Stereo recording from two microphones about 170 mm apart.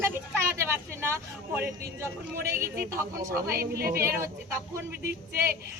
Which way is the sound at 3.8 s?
60° right (ahead or behind).